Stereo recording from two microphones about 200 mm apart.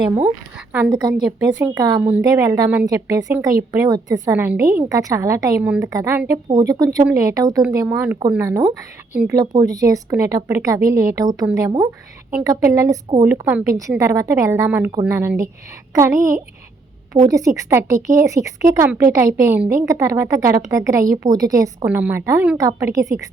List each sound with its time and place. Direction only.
0.9 s a woman's voice: 20° right (ahead or behind)
2.0 s a woman's voice: 5° right (ahead or behind)
9.4 s a woman's voice: 20° right (ahead or behind)